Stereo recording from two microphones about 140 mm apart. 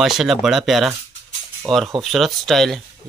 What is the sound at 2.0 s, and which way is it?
Speech, centre (ahead or behind).